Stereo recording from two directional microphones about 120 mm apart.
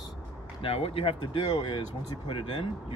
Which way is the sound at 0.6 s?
50° left (ahead or behind).